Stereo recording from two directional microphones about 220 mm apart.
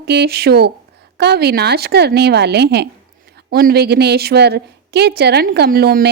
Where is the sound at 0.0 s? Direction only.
45° right (ahead or behind).